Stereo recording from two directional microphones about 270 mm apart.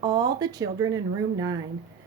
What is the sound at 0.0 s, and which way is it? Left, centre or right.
Speech, centre.